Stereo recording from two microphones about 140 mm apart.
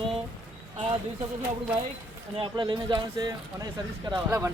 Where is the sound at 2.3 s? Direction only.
35° right (ahead or behind).